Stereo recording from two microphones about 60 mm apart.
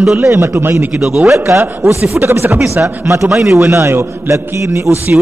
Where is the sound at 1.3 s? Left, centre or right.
Right.